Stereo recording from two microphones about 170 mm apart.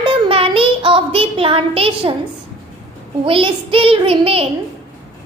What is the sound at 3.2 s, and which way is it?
A child's voice, 30° right (ahead or behind).